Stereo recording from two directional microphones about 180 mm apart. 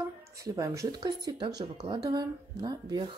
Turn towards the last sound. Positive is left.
turn(degrees=-25)  # may be behind; listen again after turning